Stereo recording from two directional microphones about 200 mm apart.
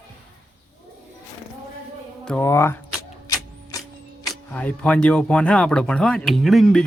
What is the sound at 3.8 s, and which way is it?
Speech, centre (ahead or behind).